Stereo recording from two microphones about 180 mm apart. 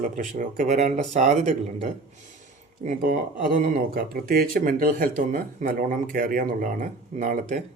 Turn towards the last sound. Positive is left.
turn(degrees=-45)  # may be behind; listen again after turning